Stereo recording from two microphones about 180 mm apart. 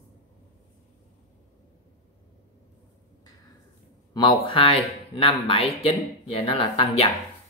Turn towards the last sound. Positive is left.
turn(degrees=30)  # may be behind; listen again after turning